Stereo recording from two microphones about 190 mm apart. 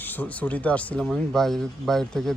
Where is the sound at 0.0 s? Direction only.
10° left (ahead or behind).